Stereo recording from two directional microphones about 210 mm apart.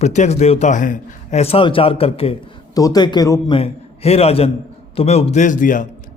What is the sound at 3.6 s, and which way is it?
A man's voice, 30° left (ahead or behind).